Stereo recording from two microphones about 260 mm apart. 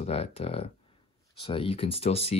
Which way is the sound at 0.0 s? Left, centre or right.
Left.